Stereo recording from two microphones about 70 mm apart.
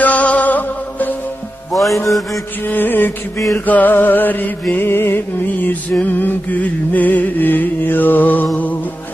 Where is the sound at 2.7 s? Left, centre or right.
Left.